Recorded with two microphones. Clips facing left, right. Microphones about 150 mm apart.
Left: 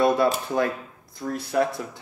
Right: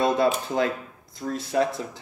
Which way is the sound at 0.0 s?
20° right (ahead or behind).